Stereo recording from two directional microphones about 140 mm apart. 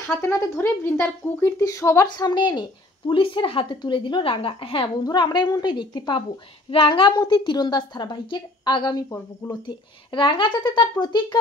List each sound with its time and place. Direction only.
0.1 s speech: 20° left (ahead or behind)
2.0 s a woman's voice: 30° left (ahead or behind)